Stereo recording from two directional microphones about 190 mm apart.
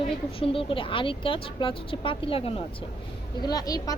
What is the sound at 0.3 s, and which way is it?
Speech, 30° left (ahead or behind).